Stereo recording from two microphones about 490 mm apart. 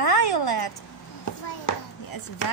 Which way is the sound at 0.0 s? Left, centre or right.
Left.